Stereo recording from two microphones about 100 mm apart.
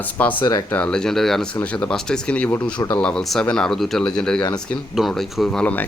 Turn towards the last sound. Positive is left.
turn(degrees=5)  # may be behind; listen again after turning